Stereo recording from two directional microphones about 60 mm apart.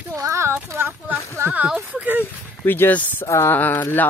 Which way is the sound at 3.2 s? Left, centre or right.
Left.